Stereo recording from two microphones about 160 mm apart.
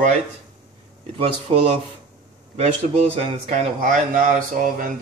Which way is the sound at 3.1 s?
45° right (ahead or behind).